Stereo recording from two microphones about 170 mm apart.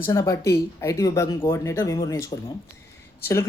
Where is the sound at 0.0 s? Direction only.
15° left (ahead or behind).